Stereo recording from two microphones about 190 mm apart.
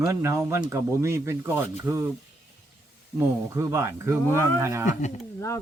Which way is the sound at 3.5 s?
15° right (ahead or behind).